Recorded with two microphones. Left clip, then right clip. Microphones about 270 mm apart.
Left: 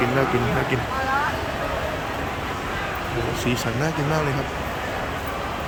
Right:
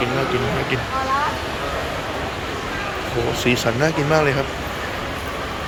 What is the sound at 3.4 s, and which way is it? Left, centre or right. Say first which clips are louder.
Speech: right 9 dB; centre.